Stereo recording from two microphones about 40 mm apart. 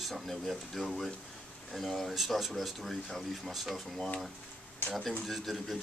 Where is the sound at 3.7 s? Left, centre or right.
Centre.